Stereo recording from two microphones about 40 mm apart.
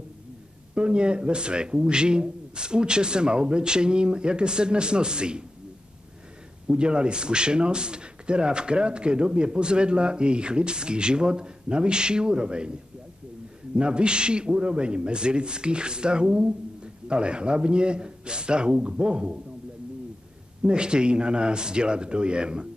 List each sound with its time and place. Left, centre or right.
0.7 s a man's voice: right
6.7 s a man's voice: right
13.7 s a man's voice: right
20.6 s a man's voice: right